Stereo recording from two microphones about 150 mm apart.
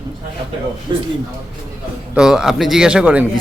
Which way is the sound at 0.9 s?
30° right (ahead or behind).